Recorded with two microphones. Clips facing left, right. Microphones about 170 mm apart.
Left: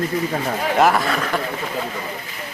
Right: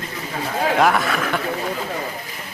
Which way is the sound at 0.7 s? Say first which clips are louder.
Left 2 dB; centre (ahead or behind).